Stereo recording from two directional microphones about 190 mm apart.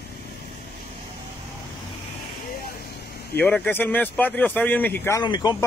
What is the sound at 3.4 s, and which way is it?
Speech, 5° left (ahead or behind).